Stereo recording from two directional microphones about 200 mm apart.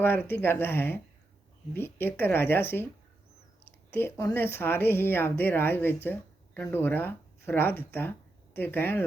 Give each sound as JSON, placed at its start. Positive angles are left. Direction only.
{"t": 0.0, "sound": "speech", "side_deg": 10}
{"t": 3.9, "sound": "speech", "side_deg": 10}